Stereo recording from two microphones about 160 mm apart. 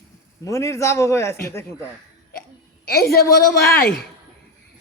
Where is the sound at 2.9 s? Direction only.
75° left (ahead or behind).